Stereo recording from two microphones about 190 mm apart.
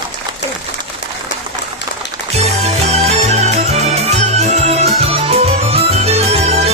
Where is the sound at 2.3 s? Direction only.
35° right (ahead or behind).